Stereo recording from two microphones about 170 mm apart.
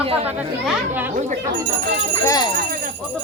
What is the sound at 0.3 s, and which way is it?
Speech, 5° right (ahead or behind).